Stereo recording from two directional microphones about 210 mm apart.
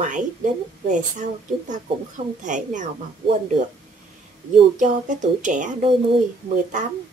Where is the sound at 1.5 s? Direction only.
30° right (ahead or behind).